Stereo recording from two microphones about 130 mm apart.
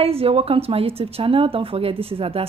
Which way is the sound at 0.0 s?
50° right (ahead or behind).